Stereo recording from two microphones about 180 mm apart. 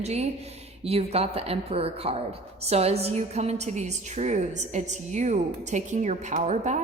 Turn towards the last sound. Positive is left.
turn(degrees=-40)  # may be behind; listen again after turning